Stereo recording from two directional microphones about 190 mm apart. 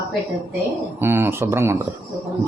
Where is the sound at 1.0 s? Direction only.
10° right (ahead or behind).